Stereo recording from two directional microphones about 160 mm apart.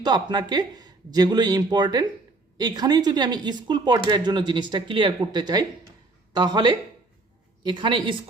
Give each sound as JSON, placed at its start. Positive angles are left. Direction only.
{"t": 0.0, "sound": "speech", "side_deg": -25}